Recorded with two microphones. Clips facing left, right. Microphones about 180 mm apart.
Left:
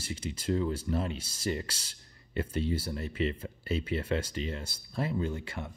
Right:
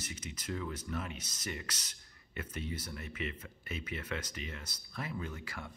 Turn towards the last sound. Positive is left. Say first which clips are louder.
# left 8 dB
turn(degrees=25)  # may be behind; listen again after turning